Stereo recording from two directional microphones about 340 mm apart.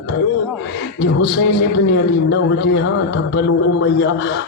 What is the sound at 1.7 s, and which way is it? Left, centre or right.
A man's voice, left.